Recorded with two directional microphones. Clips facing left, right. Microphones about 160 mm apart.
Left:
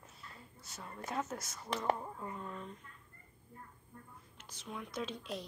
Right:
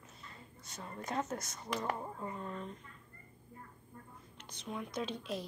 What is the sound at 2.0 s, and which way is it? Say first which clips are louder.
Speech: right 2 dB; 10° right (ahead or behind).